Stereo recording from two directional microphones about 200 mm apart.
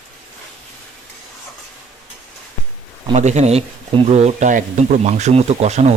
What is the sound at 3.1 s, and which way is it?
Speech, 35° right (ahead or behind).